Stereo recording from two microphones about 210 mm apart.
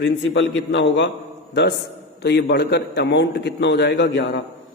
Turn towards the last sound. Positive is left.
turn(degrees=55)  # may be behind; listen again after turning